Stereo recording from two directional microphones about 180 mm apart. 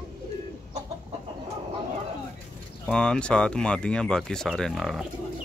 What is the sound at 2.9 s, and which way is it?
Speech, 5° left (ahead or behind).